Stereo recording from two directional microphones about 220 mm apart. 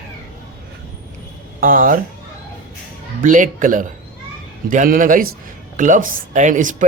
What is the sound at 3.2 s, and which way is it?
Speech, 35° right (ahead or behind).